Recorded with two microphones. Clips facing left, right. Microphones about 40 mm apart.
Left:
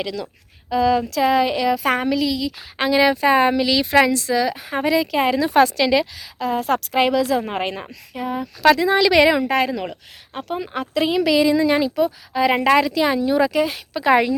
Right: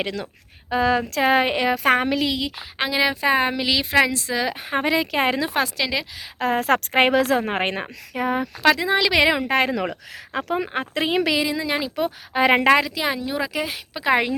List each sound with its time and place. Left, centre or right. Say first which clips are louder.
0.0 s a woman's voice: left 1 dB; right
2.6 s speech: left 7 dB; centre
4.5 s speech: left 2 dB; right
5.5 s speech: left 8 dB; centre
6.4 s a woman's voice: right 1 dB; right
8.6 s speech: left 4 dB; centre
9.5 s speech: left 1 dB; right
10.3 s speech: right 4 dB; right
10.7 s speech: left 2 dB; right
11.3 s speech: left 6 dB; centre
11.9 s a woman's voice: left 2 dB; right
12.8 s speech: left 6 dB; centre